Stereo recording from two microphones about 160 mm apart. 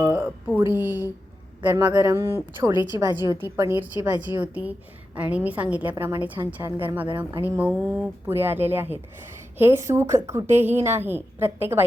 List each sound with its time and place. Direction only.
0.0 s a woman's voice: 10° right (ahead or behind)